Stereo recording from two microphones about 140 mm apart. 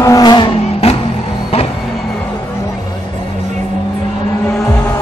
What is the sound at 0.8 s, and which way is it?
Music, 45° left (ahead or behind).